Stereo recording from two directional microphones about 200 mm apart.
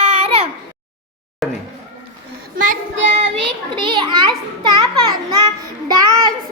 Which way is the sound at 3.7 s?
25° right (ahead or behind).